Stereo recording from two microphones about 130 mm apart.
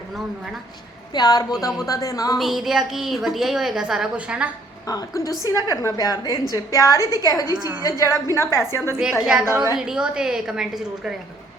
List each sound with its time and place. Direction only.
1.1 s a woman's voice: 30° left (ahead or behind)
2.4 s a woman's voice: 5° right (ahead or behind)
4.9 s a woman's voice: 30° left (ahead or behind)
9.2 s a woman's voice: 5° right (ahead or behind)